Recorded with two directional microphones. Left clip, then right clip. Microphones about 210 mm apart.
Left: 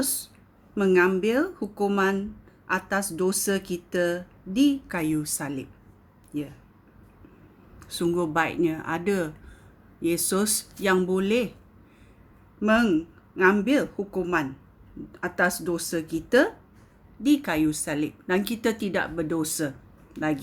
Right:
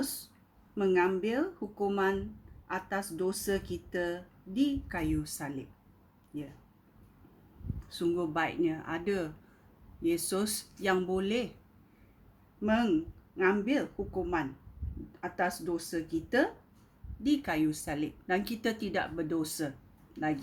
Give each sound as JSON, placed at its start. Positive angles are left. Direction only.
{"t": 0.8, "sound": "speech", "side_deg": 40}
{"t": 7.9, "sound": "speech", "side_deg": 40}
{"t": 12.6, "sound": "speech", "side_deg": 40}